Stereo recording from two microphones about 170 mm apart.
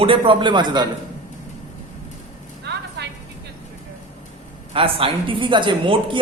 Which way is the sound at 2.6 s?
85° right.